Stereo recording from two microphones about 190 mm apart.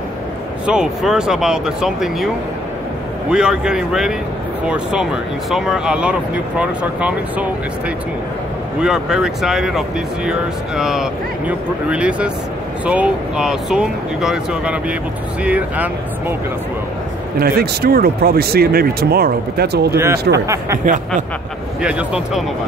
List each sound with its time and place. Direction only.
0.7 s speech: 5° right (ahead or behind)
3.3 s speech: 5° right (ahead or behind)
8.8 s speech: 5° right (ahead or behind)
17.4 s speech: 55° right (ahead or behind)
20.3 s speech: 15° right (ahead or behind)
21.8 s speech: 5° right (ahead or behind)